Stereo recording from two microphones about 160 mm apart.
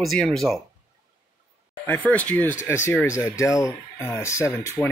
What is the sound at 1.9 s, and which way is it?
Speech, 10° left (ahead or behind).